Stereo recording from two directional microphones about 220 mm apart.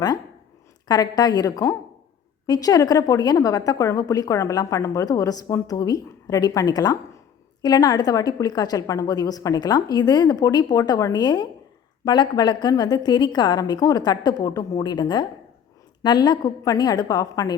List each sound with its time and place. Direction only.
0.9 s a woman's voice: 15° left (ahead or behind)